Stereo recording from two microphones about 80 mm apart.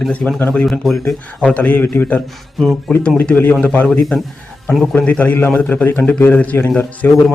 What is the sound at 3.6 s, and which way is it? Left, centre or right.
Speech, left.